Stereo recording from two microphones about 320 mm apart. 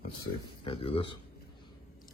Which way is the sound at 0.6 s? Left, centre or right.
Centre.